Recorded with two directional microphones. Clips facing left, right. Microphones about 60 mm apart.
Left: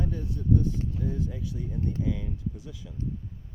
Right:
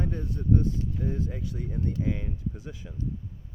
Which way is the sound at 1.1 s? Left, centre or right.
Right.